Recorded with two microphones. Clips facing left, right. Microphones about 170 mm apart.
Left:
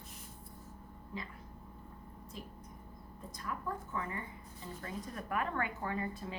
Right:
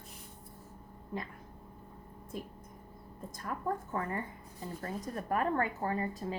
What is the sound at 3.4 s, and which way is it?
Speech, 45° right (ahead or behind).